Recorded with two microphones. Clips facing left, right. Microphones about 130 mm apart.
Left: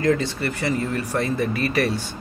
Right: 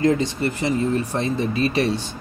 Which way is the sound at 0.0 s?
20° right (ahead or behind).